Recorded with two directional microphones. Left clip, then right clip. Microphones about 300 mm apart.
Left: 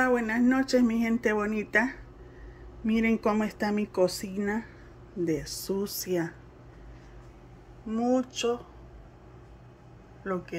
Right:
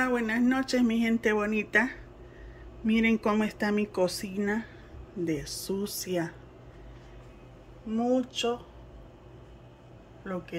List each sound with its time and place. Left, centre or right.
0.0 s speech: centre
7.9 s speech: centre
10.2 s speech: centre